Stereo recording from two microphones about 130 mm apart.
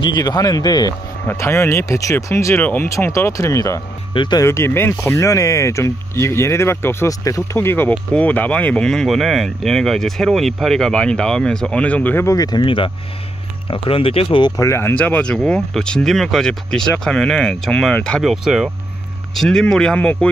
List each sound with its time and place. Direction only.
0.0 s speech: 30° left (ahead or behind)
1.2 s speech: 20° left (ahead or behind)
4.1 s speech: 40° left (ahead or behind)
4.4 s speech: 20° left (ahead or behind)
12.3 s speech: 30° left (ahead or behind)
14.6 s speech: 20° left (ahead or behind)